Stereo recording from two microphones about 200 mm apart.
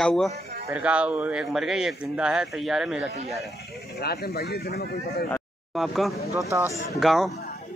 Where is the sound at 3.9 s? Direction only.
50° left (ahead or behind).